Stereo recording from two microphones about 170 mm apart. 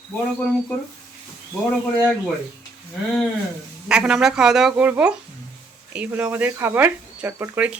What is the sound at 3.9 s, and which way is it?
A woman's voice, 5° right (ahead or behind).